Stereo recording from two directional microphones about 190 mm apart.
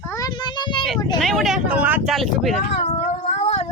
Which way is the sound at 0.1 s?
20° left (ahead or behind).